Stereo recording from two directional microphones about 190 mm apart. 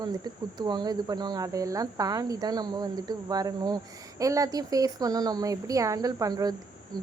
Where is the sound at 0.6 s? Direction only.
20° right (ahead or behind).